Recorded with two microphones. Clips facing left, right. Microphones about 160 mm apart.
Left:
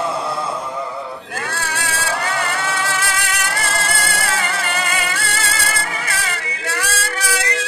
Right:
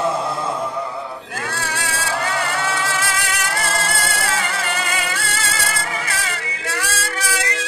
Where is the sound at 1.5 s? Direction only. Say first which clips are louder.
Even; 65° left (ahead or behind).